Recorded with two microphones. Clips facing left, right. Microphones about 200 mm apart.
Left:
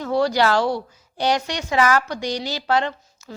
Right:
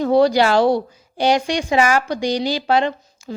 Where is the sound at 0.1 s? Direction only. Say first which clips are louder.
Right 4 dB; 15° right (ahead or behind).